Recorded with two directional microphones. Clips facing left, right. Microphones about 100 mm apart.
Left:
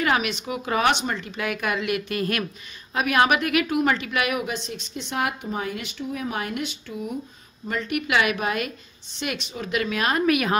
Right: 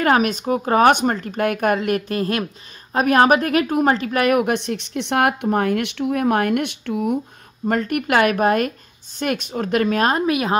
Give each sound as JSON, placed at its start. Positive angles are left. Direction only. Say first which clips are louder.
{"t": 0.0, "sound": "a woman's voice", "louder": "right 6 dB", "side_deg": -45}
{"t": 7.6, "sound": "speech", "louder": "right 6 dB", "side_deg": -50}